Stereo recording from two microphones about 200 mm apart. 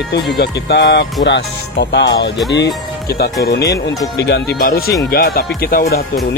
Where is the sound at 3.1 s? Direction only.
50° left (ahead or behind).